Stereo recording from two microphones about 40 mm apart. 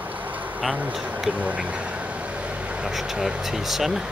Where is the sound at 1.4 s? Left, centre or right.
Right.